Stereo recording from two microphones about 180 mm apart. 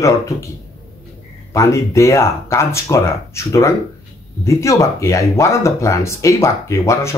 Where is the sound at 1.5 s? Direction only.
15° left (ahead or behind).